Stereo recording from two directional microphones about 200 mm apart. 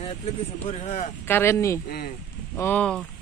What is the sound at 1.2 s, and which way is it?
Speech, 10° left (ahead or behind).